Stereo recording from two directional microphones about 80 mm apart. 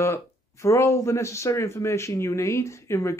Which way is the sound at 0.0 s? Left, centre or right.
Left.